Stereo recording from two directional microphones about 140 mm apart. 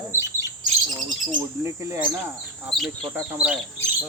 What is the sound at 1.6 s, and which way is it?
Bird, 20° right (ahead or behind).